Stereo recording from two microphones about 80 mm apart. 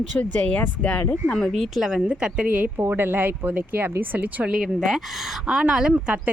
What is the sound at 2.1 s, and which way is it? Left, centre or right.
Speech, centre.